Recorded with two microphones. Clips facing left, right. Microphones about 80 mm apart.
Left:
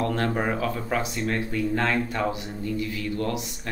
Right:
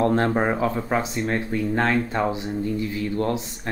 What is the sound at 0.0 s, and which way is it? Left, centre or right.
Speech, right.